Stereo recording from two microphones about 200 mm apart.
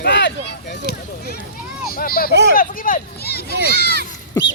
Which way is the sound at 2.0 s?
50° left (ahead or behind).